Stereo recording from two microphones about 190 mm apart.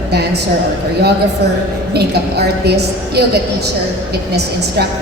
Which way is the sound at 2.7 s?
60° right (ahead or behind).